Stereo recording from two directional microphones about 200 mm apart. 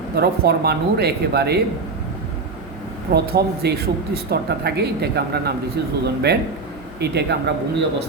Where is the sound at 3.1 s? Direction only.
55° right (ahead or behind).